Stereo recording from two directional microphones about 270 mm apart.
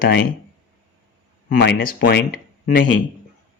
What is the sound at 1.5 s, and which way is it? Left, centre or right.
Speech, left.